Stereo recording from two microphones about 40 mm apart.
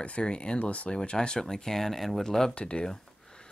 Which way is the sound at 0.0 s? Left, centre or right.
Left.